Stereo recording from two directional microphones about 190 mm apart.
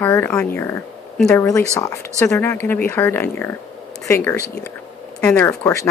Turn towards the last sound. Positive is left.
turn(degrees=10)  # may be behind; listen again after turning